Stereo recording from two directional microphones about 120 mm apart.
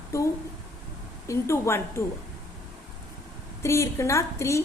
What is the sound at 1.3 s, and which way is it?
Speech, 25° left (ahead or behind).